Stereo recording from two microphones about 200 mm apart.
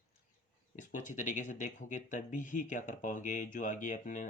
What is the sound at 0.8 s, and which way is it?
Speech, 40° left (ahead or behind).